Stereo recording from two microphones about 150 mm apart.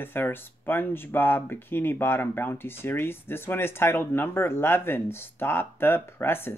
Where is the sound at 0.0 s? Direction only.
15° left (ahead or behind).